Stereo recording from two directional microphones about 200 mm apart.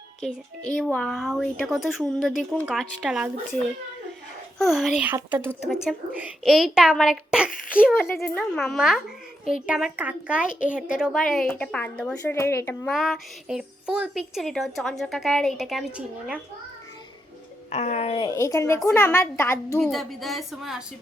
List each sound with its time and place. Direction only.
0.2 s speech: 5° left (ahead or behind)
4.5 s speech: centre (ahead or behind)
12.9 s speech: centre (ahead or behind)
17.7 s a woman's voice: 35° left (ahead or behind); by 19.9 s 10° left (ahead or behind)
19.9 s speech: centre (ahead or behind)